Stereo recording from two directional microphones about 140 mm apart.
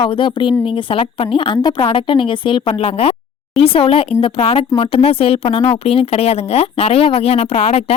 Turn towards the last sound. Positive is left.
turn(degrees=50)  # may be behind; listen again after turning